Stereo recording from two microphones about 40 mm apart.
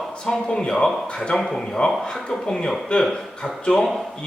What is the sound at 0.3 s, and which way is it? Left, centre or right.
Speech, left.